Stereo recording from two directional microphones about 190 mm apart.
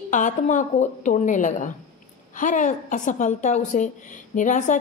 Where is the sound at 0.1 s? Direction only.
40° left (ahead or behind).